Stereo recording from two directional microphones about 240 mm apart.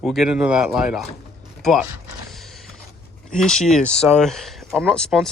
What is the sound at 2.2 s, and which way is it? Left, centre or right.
Mechanisms, centre.